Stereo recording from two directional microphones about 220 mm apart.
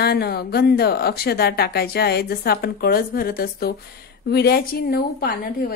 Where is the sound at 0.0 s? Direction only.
45° left (ahead or behind).